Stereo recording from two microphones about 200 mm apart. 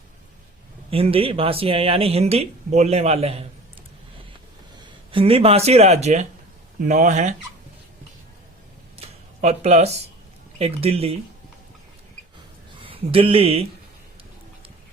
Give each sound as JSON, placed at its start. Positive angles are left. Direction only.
{"t": 0.9, "sound": "speech", "side_deg": -30}
{"t": 5.1, "sound": "speech", "side_deg": -30}
{"t": 9.0, "sound": "a sound", "side_deg": -30}
{"t": 10.6, "sound": "speech", "side_deg": -30}
{"t": 12.8, "sound": "speech", "side_deg": -25}